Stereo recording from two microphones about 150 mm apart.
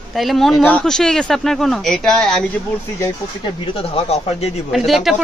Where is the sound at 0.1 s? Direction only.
Centre (ahead or behind).